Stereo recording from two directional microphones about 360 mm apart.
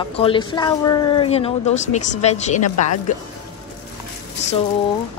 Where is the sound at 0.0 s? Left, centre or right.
Centre.